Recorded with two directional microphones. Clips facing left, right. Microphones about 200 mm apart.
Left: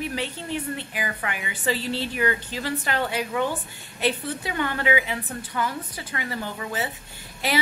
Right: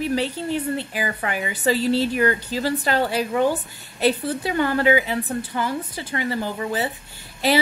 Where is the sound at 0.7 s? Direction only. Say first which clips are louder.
Right 5 dB; 35° right (ahead or behind).